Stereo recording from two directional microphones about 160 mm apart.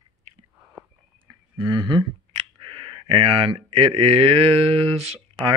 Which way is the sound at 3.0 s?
35° right (ahead or behind).